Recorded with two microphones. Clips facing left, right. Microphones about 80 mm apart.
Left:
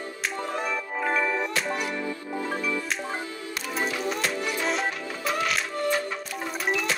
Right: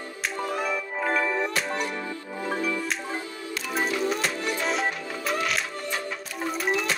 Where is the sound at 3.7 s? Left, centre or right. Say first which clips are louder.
Right 3 dB; centre.